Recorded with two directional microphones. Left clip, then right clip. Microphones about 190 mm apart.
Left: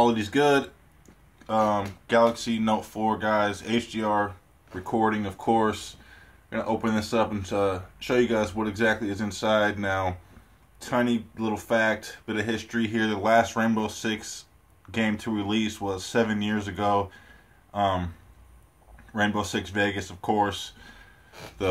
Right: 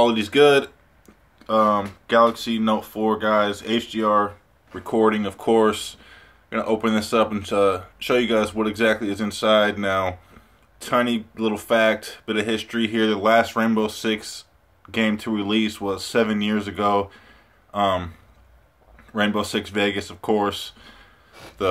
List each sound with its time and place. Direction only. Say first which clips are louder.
0.0 s speech: right 6 dB; 20° right (ahead or behind)
19.1 s speech: right 4 dB; 15° right (ahead or behind)